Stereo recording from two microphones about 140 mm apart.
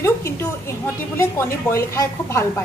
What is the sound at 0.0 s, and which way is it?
A woman's voice, 20° left (ahead or behind).